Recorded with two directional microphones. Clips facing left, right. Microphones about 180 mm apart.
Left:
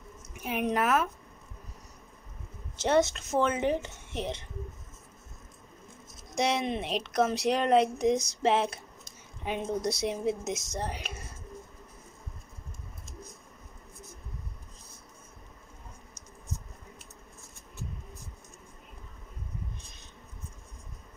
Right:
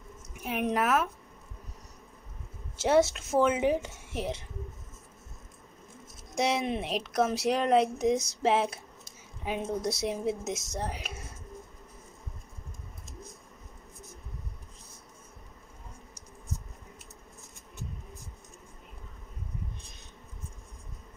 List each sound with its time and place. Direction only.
0.3 s a woman's voice: centre (ahead or behind)
2.8 s speech: 5° right (ahead or behind)
6.3 s speech: 5° right (ahead or behind)